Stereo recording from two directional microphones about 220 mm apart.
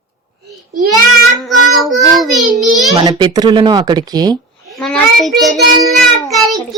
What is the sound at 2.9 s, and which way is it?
A child's voice, 20° right (ahead or behind).